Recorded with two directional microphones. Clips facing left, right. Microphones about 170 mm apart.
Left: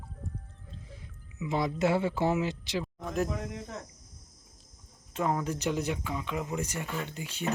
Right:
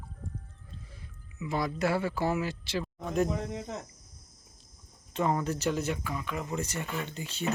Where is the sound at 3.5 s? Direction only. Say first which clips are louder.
Right 3 dB; 20° right (ahead or behind).